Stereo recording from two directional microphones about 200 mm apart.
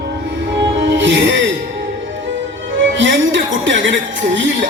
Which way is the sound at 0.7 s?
65° right (ahead or behind).